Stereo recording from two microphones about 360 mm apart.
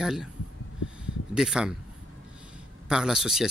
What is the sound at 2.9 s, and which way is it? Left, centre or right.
Speech, centre.